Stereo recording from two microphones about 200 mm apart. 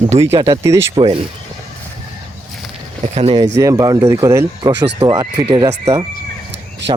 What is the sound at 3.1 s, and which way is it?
Speech, 25° right (ahead or behind).